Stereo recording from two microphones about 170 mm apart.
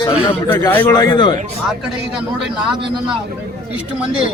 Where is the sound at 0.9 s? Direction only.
25° left (ahead or behind).